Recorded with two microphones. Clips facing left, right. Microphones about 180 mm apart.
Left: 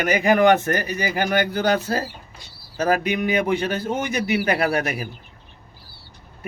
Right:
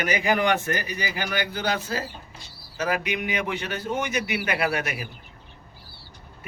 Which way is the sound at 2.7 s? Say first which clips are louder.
Left 6 dB; 35° left (ahead or behind).